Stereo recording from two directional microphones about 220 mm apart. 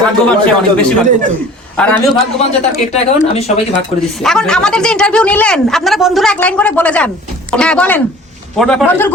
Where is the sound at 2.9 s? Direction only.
30° left (ahead or behind).